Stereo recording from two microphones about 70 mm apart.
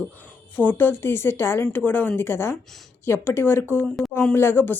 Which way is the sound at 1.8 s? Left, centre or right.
Left.